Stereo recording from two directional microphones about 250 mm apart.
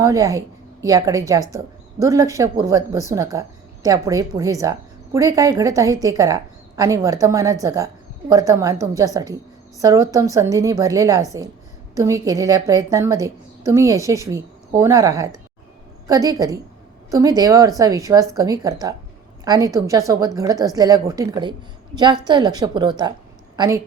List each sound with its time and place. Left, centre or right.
0.0 s a woman's voice: centre